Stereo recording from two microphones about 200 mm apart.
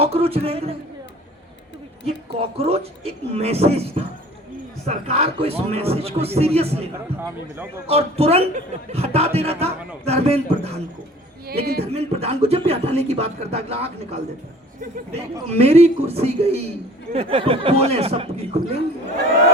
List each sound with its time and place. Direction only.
0.0 s a man's voice: 30° right (ahead or behind)
2.6 s a man's voice: 30° right (ahead or behind)
7.2 s speech: 10° right (ahead or behind)
7.9 s speech: 30° right (ahead or behind)
11.4 s speech: 50° right (ahead or behind)
11.9 s speech: 30° right (ahead or behind)
15.4 s a man's voice: 30° right (ahead or behind)